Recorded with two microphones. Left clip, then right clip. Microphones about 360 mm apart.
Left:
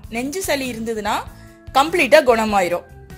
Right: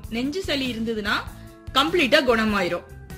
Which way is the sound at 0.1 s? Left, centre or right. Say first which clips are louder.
Left 4 dB; centre.